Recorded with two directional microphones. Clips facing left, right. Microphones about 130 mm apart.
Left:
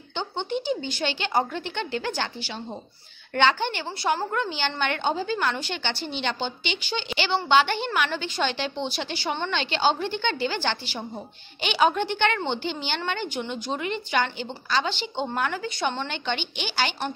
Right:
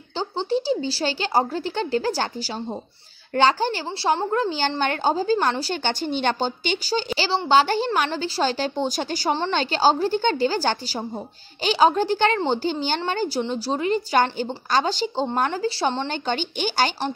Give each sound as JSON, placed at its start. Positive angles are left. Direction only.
{"t": 0.1, "sound": "a woman's voice", "side_deg": -35}